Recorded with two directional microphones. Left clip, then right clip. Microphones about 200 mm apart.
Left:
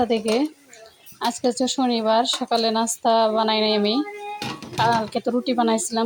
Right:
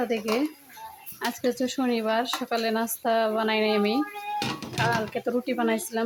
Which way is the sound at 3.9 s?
Centre (ahead or behind).